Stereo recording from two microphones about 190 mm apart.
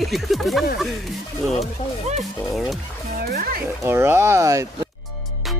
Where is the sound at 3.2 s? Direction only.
50° right (ahead or behind).